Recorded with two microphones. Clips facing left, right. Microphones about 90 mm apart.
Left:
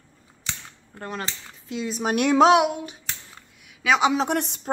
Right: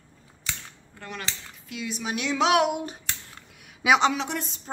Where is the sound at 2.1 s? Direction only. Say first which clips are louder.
Left 10 dB; 55° left (ahead or behind).